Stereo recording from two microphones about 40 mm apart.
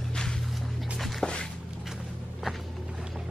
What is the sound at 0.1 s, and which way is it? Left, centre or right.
Music, centre.